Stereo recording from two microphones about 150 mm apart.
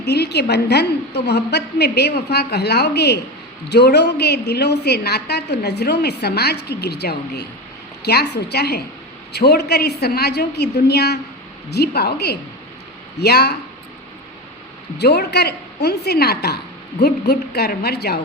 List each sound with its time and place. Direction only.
0.0 s a woman's voice: 90° left
14.9 s a woman's voice: 90° left